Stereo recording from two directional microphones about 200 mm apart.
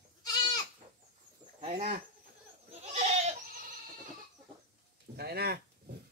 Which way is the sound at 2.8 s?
35° right (ahead or behind).